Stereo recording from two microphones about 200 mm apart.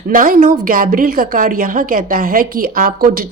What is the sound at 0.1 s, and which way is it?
A woman's voice, 45° right (ahead or behind).